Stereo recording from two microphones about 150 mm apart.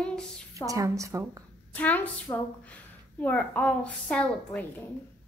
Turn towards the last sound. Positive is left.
turn(degrees=10)  # may be behind; listen again after turning